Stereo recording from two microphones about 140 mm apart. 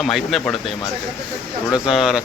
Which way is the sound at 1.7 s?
5° right (ahead or behind).